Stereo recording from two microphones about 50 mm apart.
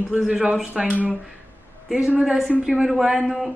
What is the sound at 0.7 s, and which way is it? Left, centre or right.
Speech, right.